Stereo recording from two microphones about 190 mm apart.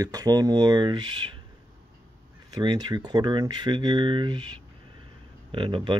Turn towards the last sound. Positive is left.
turn(degrees=-25)  # may be behind; listen again after turning